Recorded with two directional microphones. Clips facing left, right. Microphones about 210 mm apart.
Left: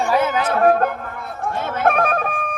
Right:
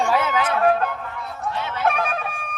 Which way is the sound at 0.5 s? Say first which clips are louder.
Left 5 dB; 50° left (ahead or behind).